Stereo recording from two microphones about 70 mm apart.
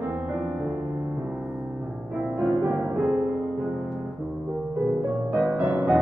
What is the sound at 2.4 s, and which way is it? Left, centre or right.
Music, centre.